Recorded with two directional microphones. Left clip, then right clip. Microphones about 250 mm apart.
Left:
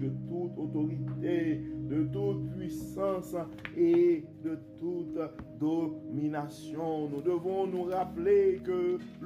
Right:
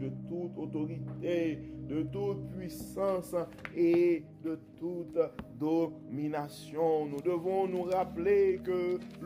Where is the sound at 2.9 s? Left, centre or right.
Right.